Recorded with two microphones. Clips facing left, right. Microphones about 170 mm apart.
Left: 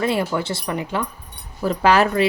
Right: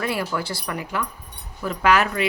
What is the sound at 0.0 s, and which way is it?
Speech, 25° left (ahead or behind).